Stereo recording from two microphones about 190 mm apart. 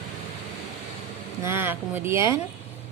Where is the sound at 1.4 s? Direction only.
10° right (ahead or behind).